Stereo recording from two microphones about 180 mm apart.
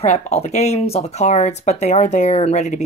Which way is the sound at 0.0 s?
35° left (ahead or behind).